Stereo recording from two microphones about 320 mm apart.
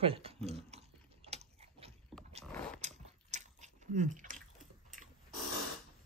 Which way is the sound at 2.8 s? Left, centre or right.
Right.